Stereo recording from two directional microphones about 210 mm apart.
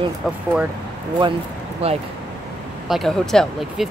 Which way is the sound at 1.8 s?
30° right (ahead or behind).